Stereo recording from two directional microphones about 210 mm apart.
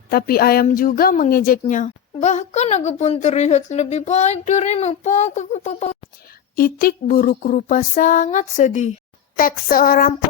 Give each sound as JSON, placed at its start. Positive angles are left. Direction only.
{"t": 0.1, "sound": "a woman's voice", "side_deg": 45}
{"t": 6.6, "sound": "a woman's voice", "side_deg": 45}